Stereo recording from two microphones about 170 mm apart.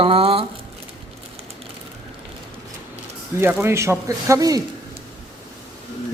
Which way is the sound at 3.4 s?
15° right (ahead or behind).